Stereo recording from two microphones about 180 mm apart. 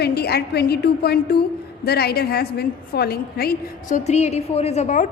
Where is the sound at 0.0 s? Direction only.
65° left (ahead or behind).